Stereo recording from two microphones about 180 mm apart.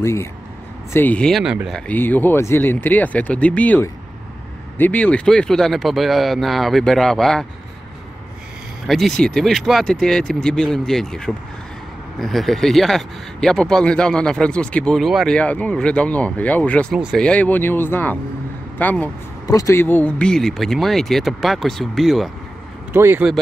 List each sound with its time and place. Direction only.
0.0 s speech: 15° left (ahead or behind); by 1.8 s 5° right (ahead or behind)
1.9 s speech: 10° left (ahead or behind)
8.8 s speech: centre (ahead or behind)
22.9 s speech: 10° right (ahead or behind)